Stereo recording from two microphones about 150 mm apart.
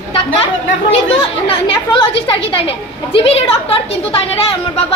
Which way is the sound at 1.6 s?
35° left (ahead or behind).